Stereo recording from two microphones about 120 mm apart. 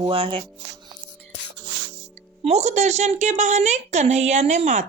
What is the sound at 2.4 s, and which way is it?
A woman's voice, 65° right (ahead or behind).